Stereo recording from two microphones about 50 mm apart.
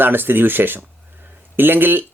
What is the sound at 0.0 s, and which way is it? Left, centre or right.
Speech, right.